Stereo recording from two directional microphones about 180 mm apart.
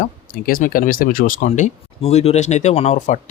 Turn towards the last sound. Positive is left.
turn(degrees=40)  # may be behind; listen again after turning